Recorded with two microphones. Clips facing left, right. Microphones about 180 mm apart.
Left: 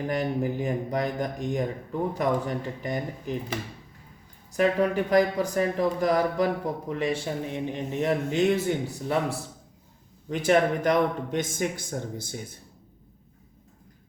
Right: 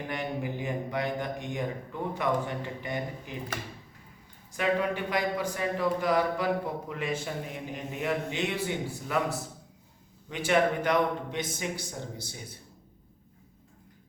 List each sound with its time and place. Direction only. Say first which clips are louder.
0.1 s speech: left 6 dB; 40° left (ahead or behind)
4.5 s speech: left 5 dB; 40° left (ahead or behind)
8.3 s speech: left 9 dB; 45° left (ahead or behind)
10.2 s speech: left 3 dB; 40° left (ahead or behind)